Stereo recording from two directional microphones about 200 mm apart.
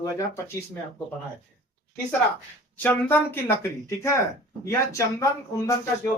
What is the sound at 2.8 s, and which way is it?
Speech, 10° left (ahead or behind).